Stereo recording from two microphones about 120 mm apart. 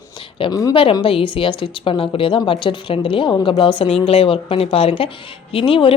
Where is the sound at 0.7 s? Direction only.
50° left (ahead or behind).